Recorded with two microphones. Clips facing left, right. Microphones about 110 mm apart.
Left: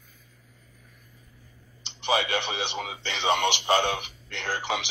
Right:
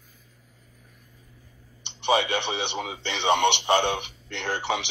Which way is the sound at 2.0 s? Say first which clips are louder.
Right 3 dB; 25° right (ahead or behind).